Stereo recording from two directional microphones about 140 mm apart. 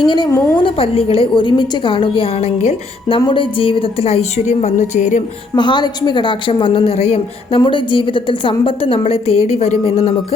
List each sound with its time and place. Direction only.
0.0 s a woman's voice: 35° left (ahead or behind); by 5.2 s 60° left (ahead or behind)
5.5 s a woman's voice: 35° left (ahead or behind)